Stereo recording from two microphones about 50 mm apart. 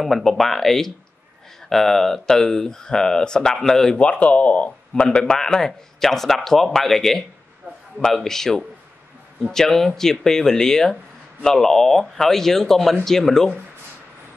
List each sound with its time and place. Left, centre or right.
0.0 s speech: centre
4.0 s speech: left; by 13.5 s centre